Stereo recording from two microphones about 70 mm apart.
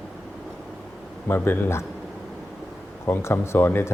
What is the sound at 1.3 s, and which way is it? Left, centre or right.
Speech, left.